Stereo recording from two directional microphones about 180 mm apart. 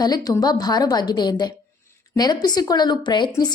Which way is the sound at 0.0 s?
20° left (ahead or behind).